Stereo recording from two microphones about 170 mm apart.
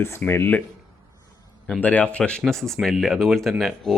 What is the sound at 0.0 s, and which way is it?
Speech, 15° left (ahead or behind).